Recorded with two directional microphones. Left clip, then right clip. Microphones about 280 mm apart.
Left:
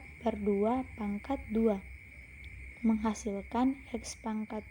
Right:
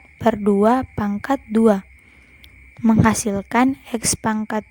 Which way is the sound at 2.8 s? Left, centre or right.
Right.